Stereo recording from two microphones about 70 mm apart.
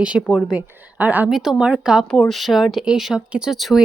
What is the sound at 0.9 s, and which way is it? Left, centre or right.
Speech, right.